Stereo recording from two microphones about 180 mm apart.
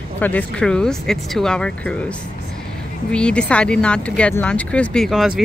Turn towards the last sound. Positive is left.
turn(degrees=0)  # may be behind; listen again after turning